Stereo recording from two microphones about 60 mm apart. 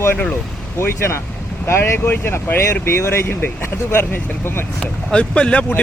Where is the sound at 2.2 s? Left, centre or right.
Left.